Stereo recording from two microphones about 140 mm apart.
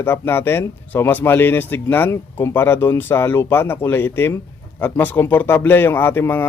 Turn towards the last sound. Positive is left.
turn(degrees=15)  # may be behind; listen again after turning